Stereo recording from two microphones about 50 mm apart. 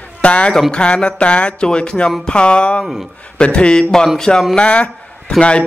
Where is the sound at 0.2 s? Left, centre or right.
Left.